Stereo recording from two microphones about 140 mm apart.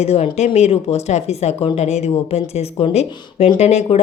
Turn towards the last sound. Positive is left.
turn(degrees=50)  # may be behind; listen again after turning